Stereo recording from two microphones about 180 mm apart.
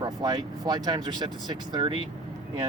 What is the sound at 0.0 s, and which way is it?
Speech, 25° right (ahead or behind).